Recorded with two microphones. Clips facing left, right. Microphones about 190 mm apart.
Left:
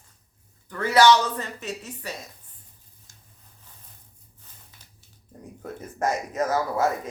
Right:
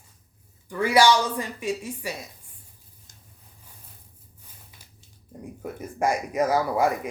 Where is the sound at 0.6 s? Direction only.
10° right (ahead or behind).